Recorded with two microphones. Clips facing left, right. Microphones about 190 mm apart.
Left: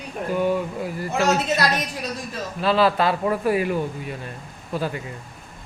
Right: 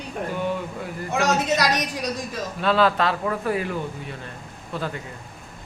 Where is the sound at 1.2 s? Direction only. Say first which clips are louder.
Even; 15° right (ahead or behind).